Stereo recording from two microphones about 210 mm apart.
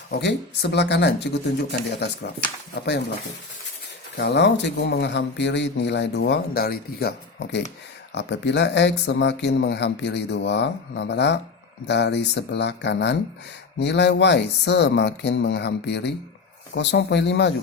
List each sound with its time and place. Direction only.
0.2 s speech: 55° left (ahead or behind)
2.7 s speech: 55° left (ahead or behind)
4.2 s speech: 50° left (ahead or behind)